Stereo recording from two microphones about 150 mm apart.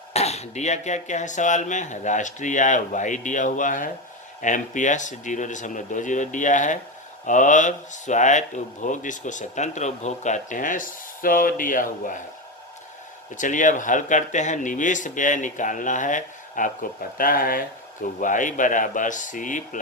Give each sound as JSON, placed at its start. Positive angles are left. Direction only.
{"t": 0.1, "sound": "speech", "side_deg": 45}
{"t": 13.3, "sound": "speech", "side_deg": 60}